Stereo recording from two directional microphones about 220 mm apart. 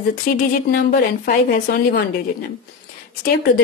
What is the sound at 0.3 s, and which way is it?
A woman's voice, 40° left (ahead or behind).